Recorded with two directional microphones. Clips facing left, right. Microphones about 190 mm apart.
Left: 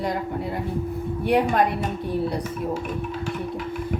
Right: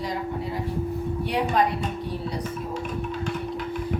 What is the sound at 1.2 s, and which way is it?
Speech, 55° left (ahead or behind).